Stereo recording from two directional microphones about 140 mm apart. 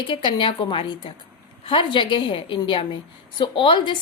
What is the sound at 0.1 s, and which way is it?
A woman's voice, 35° left (ahead or behind).